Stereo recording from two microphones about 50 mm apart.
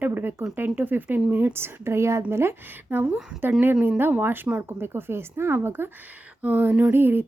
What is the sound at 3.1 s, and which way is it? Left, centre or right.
Speech, centre.